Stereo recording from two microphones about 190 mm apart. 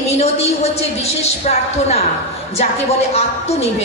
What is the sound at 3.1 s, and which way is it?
Speech, 35° left (ahead or behind).